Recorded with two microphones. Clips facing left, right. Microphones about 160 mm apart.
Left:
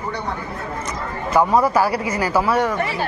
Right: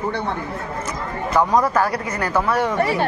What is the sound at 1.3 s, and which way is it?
A man's voice, 5° left (ahead or behind).